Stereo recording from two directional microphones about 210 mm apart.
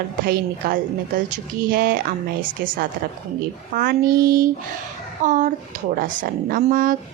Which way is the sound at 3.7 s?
45° right (ahead or behind).